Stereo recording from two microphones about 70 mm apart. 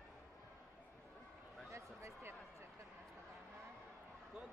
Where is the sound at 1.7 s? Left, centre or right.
Right.